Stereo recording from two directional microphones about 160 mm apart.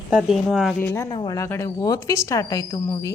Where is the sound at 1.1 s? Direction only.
25° left (ahead or behind).